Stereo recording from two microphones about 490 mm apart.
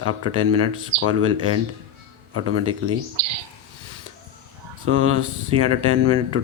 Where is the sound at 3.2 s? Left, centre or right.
Right.